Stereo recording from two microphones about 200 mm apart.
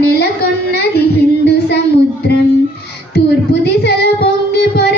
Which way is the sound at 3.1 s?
55° left (ahead or behind).